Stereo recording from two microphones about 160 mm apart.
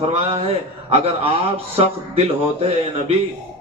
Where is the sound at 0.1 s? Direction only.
40° right (ahead or behind).